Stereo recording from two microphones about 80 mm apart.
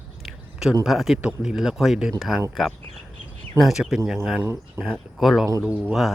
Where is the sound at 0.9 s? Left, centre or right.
Centre.